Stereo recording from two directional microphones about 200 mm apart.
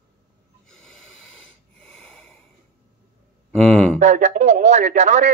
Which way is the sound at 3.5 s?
5° left (ahead or behind).